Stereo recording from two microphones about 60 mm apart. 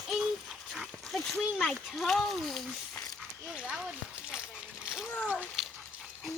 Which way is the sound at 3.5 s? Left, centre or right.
Centre.